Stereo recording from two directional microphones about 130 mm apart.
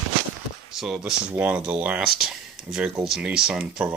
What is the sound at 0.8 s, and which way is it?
Speech, centre (ahead or behind).